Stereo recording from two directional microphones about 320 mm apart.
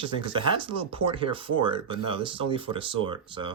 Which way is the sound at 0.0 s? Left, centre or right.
Centre.